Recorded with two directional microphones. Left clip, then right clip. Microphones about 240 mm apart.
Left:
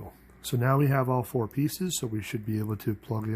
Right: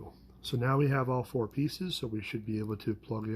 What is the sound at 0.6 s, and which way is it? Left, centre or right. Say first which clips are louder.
Speech: left 4 dB; left.